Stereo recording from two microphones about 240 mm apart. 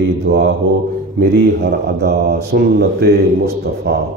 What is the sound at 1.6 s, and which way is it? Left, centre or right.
Speech, right.